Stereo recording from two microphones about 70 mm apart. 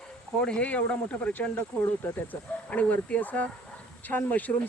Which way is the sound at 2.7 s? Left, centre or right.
Centre.